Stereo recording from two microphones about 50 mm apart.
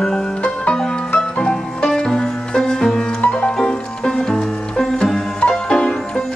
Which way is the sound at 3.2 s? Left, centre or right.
Left.